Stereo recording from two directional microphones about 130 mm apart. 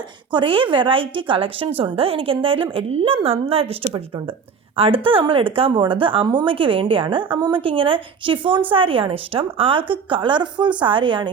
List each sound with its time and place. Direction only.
0.3 s a woman's voice: 40° right (ahead or behind)